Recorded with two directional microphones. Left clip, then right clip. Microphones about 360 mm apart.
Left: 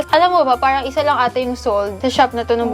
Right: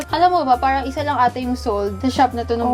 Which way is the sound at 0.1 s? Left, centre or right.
Left.